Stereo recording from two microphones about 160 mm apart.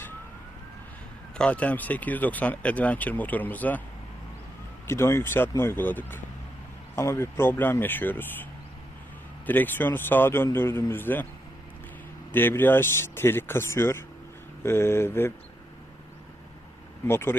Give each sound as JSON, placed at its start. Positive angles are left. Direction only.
{"t": 1.4, "sound": "speech", "side_deg": 10}
{"t": 4.9, "sound": "speech", "side_deg": 15}
{"t": 9.5, "sound": "speech", "side_deg": 10}
{"t": 12.3, "sound": "speech", "side_deg": 15}
{"t": 17.1, "sound": "speech", "side_deg": 15}